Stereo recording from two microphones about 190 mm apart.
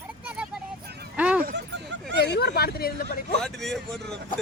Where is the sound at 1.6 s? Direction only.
70° right (ahead or behind).